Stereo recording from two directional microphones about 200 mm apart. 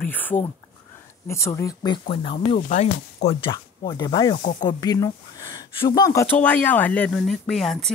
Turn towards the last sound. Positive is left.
turn(degrees=0)  # may be behind; listen again after turning